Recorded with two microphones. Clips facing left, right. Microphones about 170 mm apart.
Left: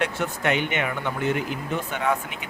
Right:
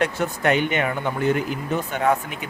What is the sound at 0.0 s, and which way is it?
A man's voice, 40° right (ahead or behind).